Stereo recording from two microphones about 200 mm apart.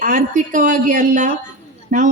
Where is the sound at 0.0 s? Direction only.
40° right (ahead or behind).